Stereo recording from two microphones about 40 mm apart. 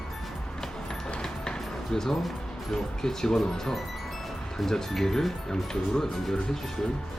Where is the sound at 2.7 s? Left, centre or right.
Centre.